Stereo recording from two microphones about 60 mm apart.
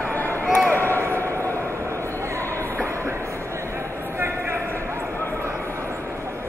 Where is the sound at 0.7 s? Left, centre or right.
Right.